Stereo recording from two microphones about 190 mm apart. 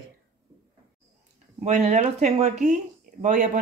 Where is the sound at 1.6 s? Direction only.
35° right (ahead or behind).